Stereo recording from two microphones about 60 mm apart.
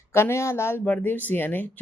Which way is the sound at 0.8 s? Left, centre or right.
Left.